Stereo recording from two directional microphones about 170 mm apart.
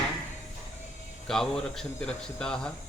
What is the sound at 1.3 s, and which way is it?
Speech, 5° left (ahead or behind).